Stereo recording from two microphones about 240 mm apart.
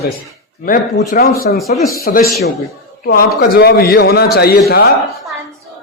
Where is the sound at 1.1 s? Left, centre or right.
Left.